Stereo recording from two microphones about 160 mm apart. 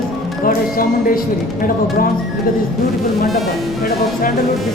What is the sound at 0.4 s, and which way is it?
Speech, 60° left (ahead or behind).